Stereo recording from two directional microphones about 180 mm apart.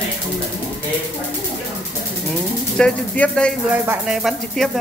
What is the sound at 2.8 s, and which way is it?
Speech, 5° left (ahead or behind).